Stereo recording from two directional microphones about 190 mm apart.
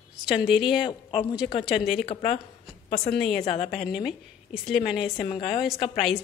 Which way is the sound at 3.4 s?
30° left (ahead or behind).